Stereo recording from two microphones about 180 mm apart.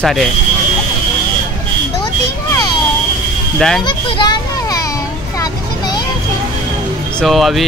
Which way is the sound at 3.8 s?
25° left (ahead or behind).